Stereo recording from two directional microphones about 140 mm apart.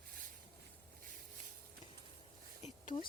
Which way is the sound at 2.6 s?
55° left (ahead or behind).